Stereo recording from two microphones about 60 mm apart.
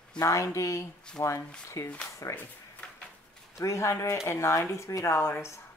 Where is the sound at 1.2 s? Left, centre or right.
Left.